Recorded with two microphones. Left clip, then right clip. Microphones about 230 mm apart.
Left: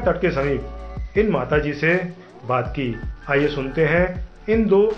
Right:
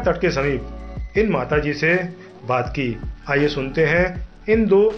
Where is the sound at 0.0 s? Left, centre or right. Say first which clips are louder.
Right 1 dB; right.